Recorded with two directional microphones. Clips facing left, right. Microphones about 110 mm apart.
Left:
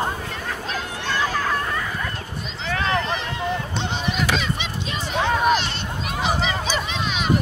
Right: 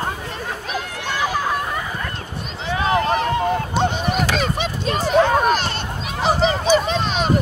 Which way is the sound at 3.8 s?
50° right (ahead or behind).